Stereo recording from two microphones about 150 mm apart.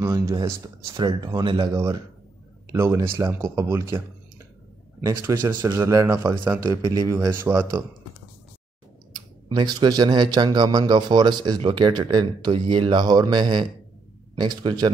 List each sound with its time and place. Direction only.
0.0 s speech: 20° right (ahead or behind)
5.3 s speech: 30° right (ahead or behind)
9.1 s a man's voice: 30° right (ahead or behind)